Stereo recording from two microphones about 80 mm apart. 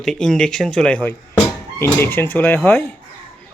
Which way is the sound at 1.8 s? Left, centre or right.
Left.